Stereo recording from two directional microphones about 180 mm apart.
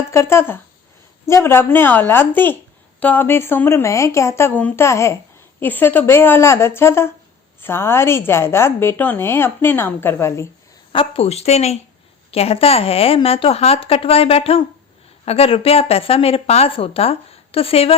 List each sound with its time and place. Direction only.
0.1 s a woman's voice: 15° left (ahead or behind)
10.9 s speech: 30° left (ahead or behind)